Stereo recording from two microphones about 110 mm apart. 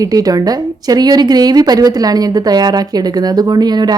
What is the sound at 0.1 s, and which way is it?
A woman's voice, 35° right (ahead or behind).